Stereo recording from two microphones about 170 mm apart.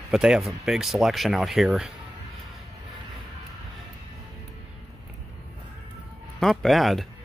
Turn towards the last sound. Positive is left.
turn(degrees=0)  # may be behind; listen again after turning